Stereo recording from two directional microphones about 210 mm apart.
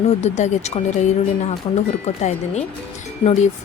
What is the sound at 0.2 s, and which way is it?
Speech, 35° left (ahead or behind).